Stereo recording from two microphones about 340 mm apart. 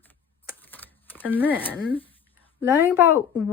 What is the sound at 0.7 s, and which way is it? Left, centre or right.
Typewriter, centre.